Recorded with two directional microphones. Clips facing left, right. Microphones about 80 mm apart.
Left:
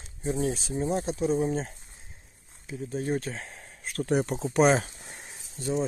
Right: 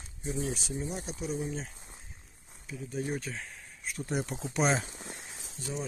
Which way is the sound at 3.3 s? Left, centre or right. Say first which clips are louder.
Left 2 dB; left.